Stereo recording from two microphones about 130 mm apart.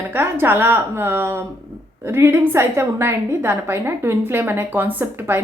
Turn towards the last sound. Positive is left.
turn(degrees=-20)  # may be behind; listen again after turning